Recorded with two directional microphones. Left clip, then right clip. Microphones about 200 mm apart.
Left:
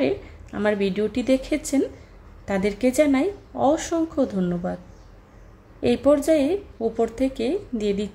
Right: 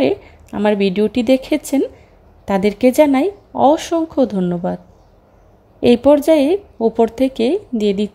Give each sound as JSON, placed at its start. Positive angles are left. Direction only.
{"t": 0.0, "sound": "speech", "side_deg": -30}
{"t": 5.8, "sound": "speech", "side_deg": -30}